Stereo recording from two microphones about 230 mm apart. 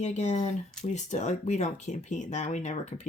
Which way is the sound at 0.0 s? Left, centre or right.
Left.